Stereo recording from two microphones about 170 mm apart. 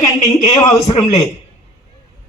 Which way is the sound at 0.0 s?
20° left (ahead or behind).